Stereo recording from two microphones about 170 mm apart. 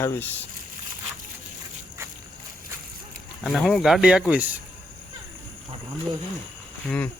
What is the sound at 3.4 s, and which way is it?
Speech, centre (ahead or behind).